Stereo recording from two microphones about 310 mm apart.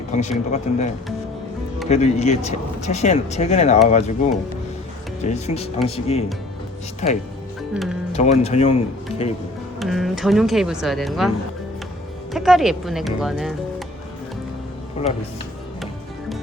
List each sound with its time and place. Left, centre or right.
0.1 s speech: left
1.9 s speech: left
5.2 s speech: left
7.0 s speech: left
7.7 s speech: centre
8.1 s speech: left
9.8 s speech: centre
12.3 s speech: centre